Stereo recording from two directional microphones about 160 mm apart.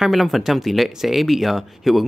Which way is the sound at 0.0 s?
Centre (ahead or behind).